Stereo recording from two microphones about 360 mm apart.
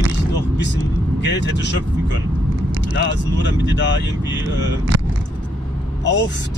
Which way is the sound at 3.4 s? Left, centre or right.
Left.